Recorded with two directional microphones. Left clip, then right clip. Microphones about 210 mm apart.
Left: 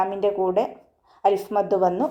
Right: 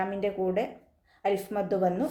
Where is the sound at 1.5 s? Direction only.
65° left (ahead or behind).